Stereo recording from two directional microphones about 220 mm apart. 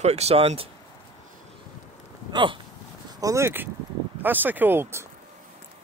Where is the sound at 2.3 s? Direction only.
20° right (ahead or behind).